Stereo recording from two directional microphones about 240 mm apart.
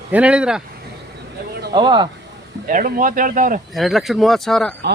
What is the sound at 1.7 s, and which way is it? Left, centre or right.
Speech, centre.